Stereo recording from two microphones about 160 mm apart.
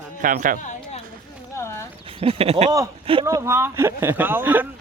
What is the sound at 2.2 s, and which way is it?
Speech, 35° right (ahead or behind).